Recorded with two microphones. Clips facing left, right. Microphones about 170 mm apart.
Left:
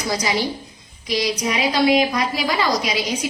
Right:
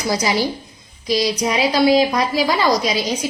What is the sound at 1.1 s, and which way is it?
Speech, 30° right (ahead or behind).